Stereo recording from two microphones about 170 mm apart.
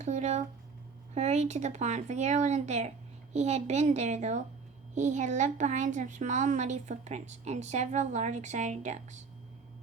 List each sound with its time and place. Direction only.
0.0 s a woman's voice: 45° right (ahead or behind)